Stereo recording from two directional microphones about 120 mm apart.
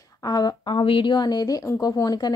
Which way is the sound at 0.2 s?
35° left (ahead or behind).